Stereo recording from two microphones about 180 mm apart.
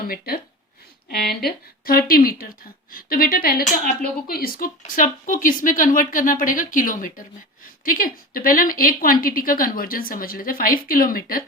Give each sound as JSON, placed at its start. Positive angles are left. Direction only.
{"t": 0.0, "sound": "speech", "side_deg": 55}